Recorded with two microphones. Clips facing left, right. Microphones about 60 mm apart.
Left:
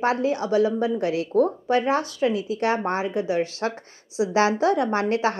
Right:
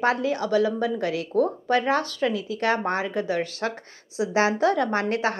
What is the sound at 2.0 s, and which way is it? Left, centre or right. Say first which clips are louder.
A woman's voice: left 2 dB; centre.